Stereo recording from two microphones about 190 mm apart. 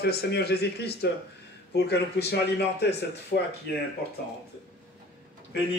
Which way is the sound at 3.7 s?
60° left (ahead or behind).